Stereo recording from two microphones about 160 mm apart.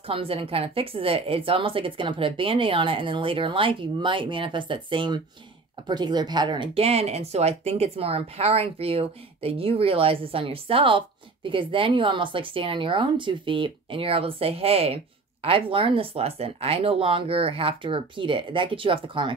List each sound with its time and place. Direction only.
0.0 s speech: 35° right (ahead or behind)